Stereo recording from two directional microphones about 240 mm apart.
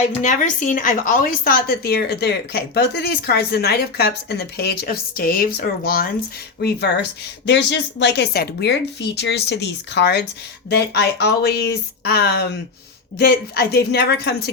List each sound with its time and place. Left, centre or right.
0.0 s a woman's voice: left